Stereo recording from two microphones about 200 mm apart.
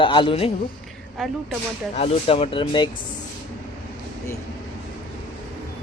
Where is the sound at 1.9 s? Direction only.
30° left (ahead or behind).